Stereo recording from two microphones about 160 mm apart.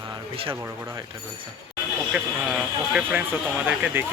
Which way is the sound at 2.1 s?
5° right (ahead or behind).